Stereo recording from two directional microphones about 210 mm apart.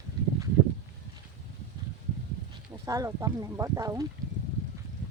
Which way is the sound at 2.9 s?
15° right (ahead or behind).